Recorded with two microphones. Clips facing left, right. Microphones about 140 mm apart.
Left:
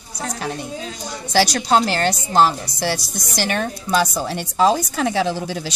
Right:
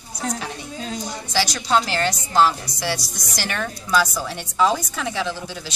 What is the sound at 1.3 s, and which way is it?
Speech, 65° left (ahead or behind).